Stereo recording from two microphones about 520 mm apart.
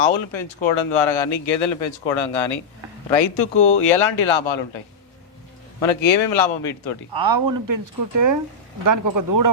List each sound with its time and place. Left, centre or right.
0.0 s speech: left
5.8 s speech: left
7.1 s speech: right